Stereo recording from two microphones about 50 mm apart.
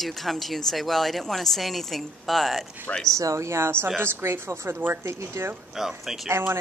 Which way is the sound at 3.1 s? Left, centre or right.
Right.